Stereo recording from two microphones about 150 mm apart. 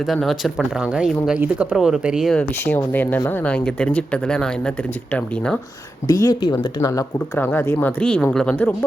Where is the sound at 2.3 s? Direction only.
10° left (ahead or behind).